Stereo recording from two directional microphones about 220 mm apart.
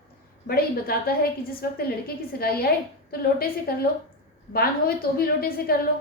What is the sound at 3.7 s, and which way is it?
A woman's voice, 45° left (ahead or behind).